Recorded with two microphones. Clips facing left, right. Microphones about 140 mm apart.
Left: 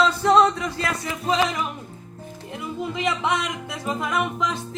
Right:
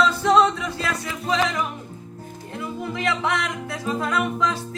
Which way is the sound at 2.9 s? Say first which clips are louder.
Even; 15° left (ahead or behind).